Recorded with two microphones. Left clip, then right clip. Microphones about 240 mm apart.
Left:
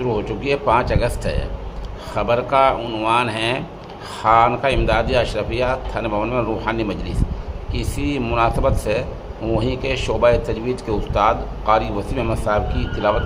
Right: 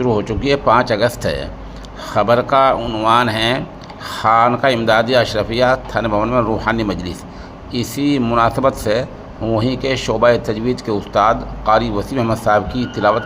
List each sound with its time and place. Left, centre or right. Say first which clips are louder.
0.0 s a man's voice: right 5 dB; centre